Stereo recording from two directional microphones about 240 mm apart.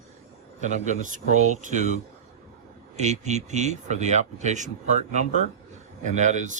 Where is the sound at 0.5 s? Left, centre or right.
Right.